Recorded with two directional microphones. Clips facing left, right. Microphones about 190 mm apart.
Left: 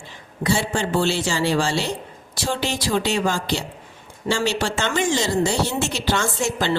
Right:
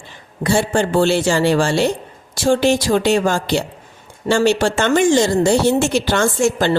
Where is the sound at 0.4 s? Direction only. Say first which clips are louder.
Right 6 dB; 50° right (ahead or behind).